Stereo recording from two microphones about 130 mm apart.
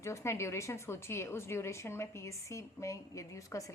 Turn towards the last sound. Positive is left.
turn(degrees=25)  # may be behind; listen again after turning